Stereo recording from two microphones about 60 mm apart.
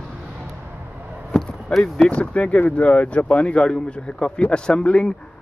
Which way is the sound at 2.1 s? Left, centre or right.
Left.